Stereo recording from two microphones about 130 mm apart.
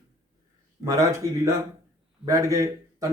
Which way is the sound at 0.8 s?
25° right (ahead or behind).